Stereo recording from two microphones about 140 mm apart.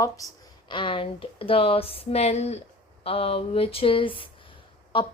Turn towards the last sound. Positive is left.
turn(degrees=35)  # may be behind; listen again after turning